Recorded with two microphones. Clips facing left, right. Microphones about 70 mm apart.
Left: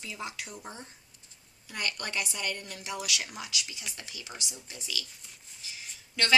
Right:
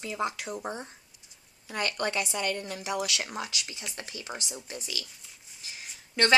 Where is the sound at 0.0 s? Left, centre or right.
Right.